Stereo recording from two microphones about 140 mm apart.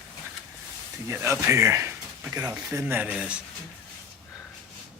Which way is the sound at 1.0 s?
20° right (ahead or behind).